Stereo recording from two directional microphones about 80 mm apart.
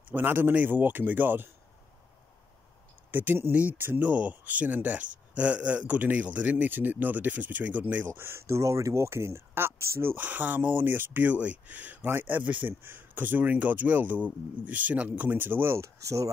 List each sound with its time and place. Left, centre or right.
0.1 s speech: right
3.1 s speech: right